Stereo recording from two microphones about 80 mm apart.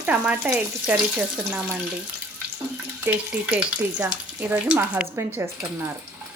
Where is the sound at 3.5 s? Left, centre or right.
Centre.